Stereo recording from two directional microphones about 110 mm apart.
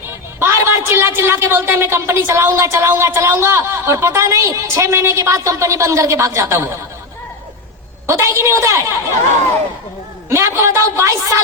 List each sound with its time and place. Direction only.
0.3 s a woman's voice: 25° right (ahead or behind)
8.0 s a woman's voice: 25° right (ahead or behind)
10.2 s a woman's voice: 25° right (ahead or behind)